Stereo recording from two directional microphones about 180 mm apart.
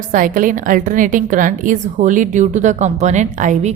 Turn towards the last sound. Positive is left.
turn(degrees=-40)  # may be behind; listen again after turning